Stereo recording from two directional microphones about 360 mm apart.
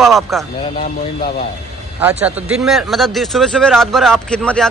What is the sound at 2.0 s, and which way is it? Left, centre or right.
Speech, centre.